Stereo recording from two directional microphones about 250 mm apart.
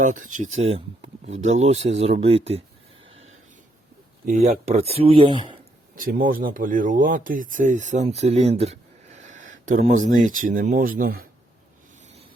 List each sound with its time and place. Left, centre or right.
0.0 s speech: right
3.1 s a sound: right
4.3 s speech: right
5.9 s speech: right